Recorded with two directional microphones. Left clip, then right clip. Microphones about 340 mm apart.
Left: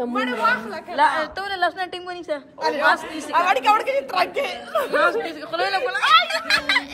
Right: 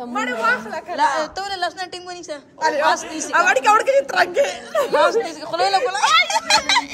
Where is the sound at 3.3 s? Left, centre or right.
Right.